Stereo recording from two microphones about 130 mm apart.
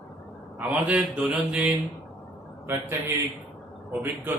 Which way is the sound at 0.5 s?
10° right (ahead or behind).